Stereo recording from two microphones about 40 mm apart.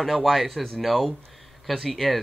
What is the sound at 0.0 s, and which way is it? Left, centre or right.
Speech, centre.